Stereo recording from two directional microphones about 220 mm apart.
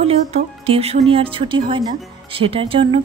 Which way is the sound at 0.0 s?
30° right (ahead or behind).